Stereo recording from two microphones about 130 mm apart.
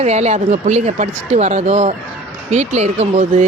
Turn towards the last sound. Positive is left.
turn(degrees=-60)  # may be behind; listen again after turning